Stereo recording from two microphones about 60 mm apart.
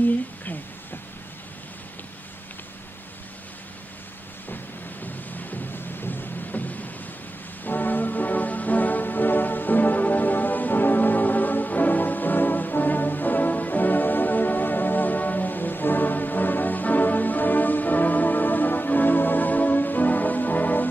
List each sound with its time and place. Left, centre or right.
5.0 s music: left